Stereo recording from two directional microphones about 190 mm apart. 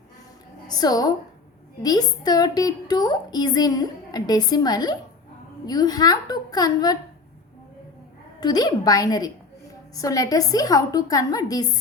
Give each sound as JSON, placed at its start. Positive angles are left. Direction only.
{"t": 0.7, "sound": "a woman's voice", "side_deg": 20}
{"t": 8.4, "sound": "a woman's voice", "side_deg": 20}